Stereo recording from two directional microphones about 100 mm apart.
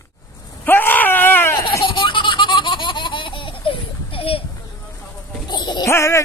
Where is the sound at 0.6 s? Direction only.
20° left (ahead or behind).